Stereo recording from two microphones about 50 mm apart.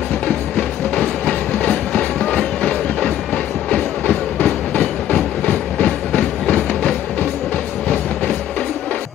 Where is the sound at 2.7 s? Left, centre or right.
Left.